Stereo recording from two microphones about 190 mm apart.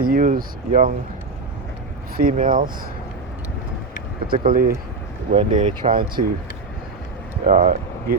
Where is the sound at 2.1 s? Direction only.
45° right (ahead or behind).